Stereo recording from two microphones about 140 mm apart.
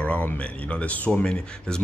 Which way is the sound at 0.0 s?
10° left (ahead or behind).